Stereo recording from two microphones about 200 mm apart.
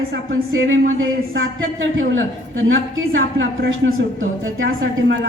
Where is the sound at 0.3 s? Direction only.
80° right.